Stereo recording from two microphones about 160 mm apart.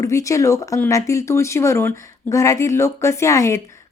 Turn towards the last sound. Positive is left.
turn(degrees=20)  # may be behind; listen again after turning